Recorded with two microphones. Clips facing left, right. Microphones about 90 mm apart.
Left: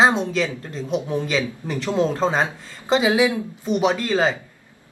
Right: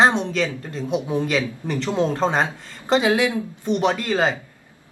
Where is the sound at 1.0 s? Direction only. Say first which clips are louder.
Right 1 dB; 15° right (ahead or behind).